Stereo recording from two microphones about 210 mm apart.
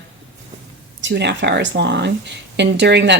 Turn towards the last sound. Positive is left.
turn(degrees=-55)  # may be behind; listen again after turning